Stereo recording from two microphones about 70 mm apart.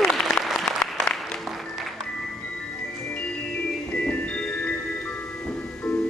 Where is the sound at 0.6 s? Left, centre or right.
Centre.